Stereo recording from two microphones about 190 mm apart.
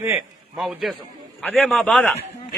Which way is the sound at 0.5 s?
Centre (ahead or behind).